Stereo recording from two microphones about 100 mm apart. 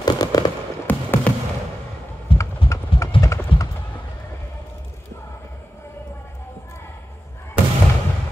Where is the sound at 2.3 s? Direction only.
65° left (ahead or behind).